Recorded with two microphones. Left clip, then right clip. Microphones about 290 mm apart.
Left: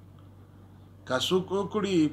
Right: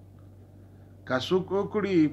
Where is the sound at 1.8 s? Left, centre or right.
Left.